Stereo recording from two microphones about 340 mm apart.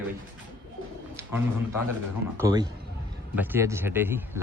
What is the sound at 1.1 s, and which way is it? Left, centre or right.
Speech, centre.